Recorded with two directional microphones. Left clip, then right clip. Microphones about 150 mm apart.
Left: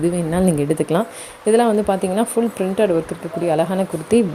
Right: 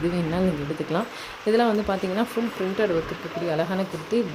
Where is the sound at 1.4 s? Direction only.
25° left (ahead or behind).